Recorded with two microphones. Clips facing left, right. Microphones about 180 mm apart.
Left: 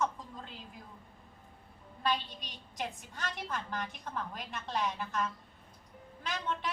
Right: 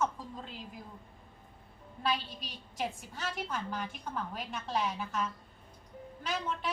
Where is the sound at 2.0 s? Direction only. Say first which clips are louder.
Even; 5° right (ahead or behind).